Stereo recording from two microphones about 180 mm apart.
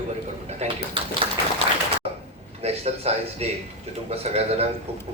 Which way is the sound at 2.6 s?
35° right (ahead or behind).